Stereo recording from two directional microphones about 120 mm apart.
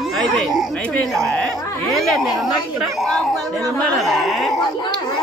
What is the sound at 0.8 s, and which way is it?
Speech, 10° left (ahead or behind).